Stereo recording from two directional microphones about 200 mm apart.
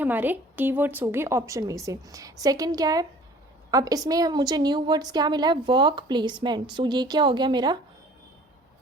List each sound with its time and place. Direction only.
0.0 s a woman's voice: 10° right (ahead or behind)